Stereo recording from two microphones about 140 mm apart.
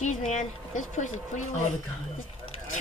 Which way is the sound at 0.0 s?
65° left (ahead or behind).